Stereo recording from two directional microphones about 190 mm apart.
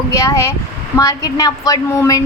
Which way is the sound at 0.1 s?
15° left (ahead or behind).